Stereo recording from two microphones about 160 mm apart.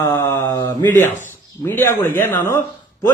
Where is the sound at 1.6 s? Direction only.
15° left (ahead or behind).